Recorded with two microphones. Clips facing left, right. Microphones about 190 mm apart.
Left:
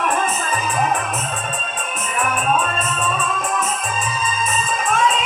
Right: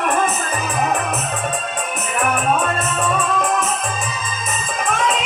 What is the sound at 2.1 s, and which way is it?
Music, 75° right (ahead or behind).